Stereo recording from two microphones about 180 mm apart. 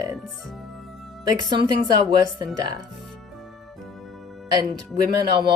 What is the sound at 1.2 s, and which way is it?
Speech, 25° right (ahead or behind).